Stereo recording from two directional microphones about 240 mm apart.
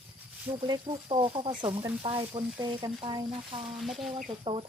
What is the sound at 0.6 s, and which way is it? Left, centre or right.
Speech, centre.